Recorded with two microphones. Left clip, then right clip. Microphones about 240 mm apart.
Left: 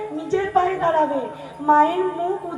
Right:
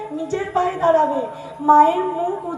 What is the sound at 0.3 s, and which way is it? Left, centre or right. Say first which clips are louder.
A woman's voice: left 2 dB; right.